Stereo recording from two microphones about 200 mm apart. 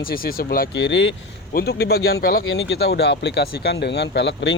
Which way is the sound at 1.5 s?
50° left (ahead or behind).